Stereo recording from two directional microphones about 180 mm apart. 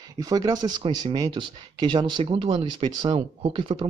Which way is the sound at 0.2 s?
20° right (ahead or behind).